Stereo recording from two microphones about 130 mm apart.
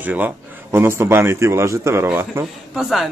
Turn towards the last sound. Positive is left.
turn(degrees=0)  # may be behind; listen again after turning